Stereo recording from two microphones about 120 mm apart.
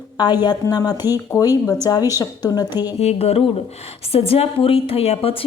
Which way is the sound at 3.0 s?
60° left (ahead or behind).